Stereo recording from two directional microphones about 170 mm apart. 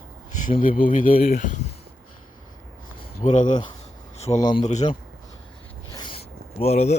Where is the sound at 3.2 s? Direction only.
45° left (ahead or behind).